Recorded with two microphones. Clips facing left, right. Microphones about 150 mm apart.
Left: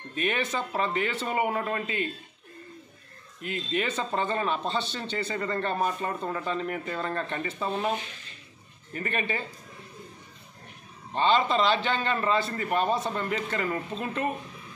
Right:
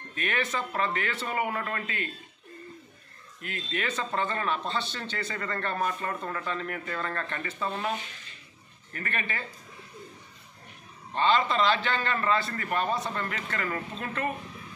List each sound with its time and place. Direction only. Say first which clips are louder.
0.1 s speech: left 2 dB; 20° left (ahead or behind)
3.4 s speech: left 4 dB; 20° left (ahead or behind)
8.9 s speech: left 4 dB; 20° left (ahead or behind)
11.1 s speech: left 1 dB; 20° left (ahead or behind)